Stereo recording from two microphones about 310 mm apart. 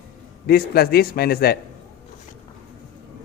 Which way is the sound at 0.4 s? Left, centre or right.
Left.